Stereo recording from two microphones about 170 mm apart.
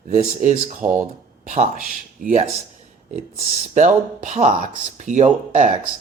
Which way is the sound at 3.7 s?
45° right (ahead or behind).